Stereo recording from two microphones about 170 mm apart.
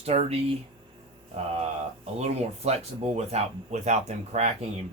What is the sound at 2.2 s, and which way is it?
Speech, 40° right (ahead or behind).